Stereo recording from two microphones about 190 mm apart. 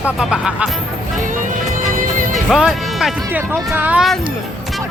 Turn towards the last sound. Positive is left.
turn(degrees=0)  # may be behind; listen again after turning